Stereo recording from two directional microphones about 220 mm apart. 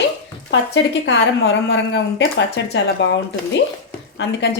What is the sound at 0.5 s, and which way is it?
A woman's voice, 55° left (ahead or behind).